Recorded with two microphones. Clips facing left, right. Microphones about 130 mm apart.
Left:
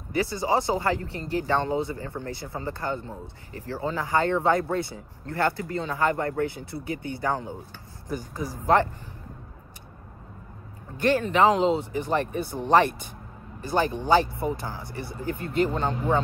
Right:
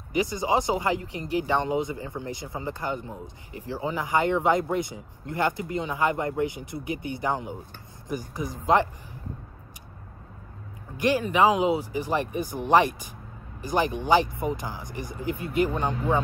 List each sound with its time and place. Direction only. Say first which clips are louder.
0.1 s speech: even; 15° right (ahead or behind)
11.0 s speech: left 1 dB; 10° right (ahead or behind)